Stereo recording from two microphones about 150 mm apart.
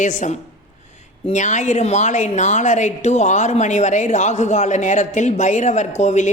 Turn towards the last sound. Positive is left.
turn(degrees=50)  # may be behind; listen again after turning